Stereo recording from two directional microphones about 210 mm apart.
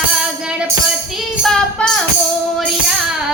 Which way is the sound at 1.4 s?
Centre (ahead or behind).